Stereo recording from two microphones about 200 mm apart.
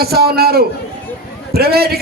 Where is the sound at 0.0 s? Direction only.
50° right (ahead or behind).